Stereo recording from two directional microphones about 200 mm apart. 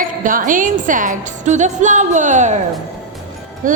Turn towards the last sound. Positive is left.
turn(degrees=-40)  # may be behind; listen again after turning